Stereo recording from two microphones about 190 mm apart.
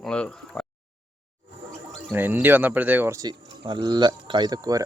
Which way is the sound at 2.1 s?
10° right (ahead or behind).